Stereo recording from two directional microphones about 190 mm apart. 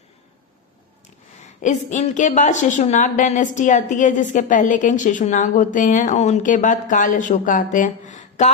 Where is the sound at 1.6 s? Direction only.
40° left (ahead or behind).